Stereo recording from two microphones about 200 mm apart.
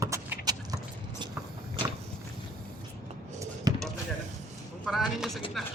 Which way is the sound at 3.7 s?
20° right (ahead or behind).